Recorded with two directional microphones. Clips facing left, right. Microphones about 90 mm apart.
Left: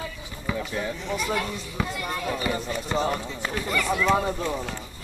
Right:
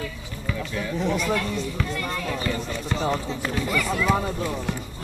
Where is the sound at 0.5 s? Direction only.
20° left (ahead or behind).